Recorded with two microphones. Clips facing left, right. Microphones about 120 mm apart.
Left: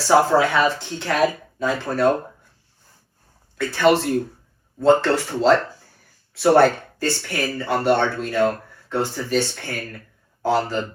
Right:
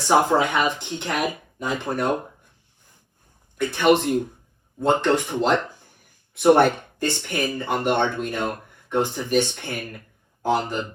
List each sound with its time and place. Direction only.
0.0 s speech: 20° right (ahead or behind)
3.6 s speech: 15° right (ahead or behind)